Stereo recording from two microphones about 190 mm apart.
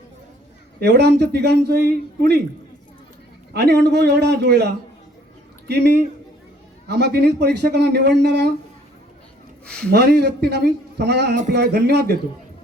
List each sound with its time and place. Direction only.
0.8 s a man's voice: 60° right (ahead or behind)
3.5 s a man's voice: 60° right (ahead or behind)
9.6 s speech: 5° left (ahead or behind)
9.9 s a man's voice: 60° right (ahead or behind)